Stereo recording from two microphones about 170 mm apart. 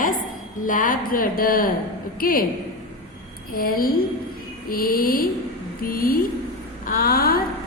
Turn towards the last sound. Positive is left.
turn(degrees=60)  # may be behind; listen again after turning